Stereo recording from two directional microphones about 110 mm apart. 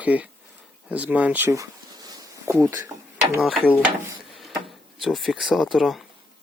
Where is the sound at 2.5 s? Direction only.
25° right (ahead or behind).